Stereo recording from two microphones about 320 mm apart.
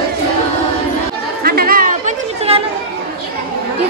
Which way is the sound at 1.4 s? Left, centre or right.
Right.